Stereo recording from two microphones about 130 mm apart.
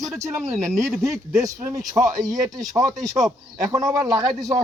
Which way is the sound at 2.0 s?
10° right (ahead or behind).